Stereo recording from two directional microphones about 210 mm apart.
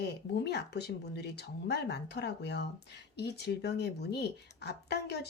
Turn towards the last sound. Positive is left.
turn(degrees=50)  # may be behind; listen again after turning